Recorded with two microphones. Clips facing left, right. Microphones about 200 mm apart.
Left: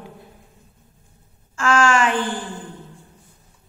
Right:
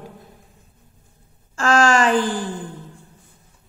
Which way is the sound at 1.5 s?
35° right (ahead or behind).